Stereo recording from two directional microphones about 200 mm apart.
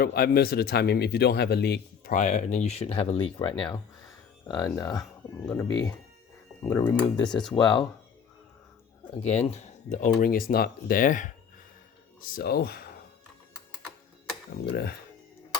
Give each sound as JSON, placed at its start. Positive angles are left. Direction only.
{"t": 0.0, "sound": "speech", "side_deg": 50}
{"t": 2.1, "sound": "speech", "side_deg": 35}
{"t": 9.2, "sound": "speech", "side_deg": 35}
{"t": 12.3, "sound": "speech", "side_deg": 50}
{"t": 14.5, "sound": "speech", "side_deg": 55}